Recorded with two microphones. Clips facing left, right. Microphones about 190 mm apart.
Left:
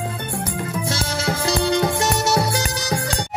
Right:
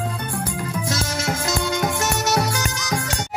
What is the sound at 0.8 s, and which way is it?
Music, 30° left (ahead or behind).